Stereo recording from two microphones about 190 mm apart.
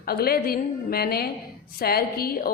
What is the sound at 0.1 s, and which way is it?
A woman's voice, 55° left (ahead or behind).